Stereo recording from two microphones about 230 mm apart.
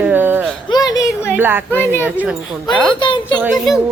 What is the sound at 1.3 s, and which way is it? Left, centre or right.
Speech, centre.